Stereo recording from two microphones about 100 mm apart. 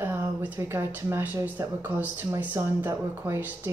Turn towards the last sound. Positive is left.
turn(degrees=-20)  # may be behind; listen again after turning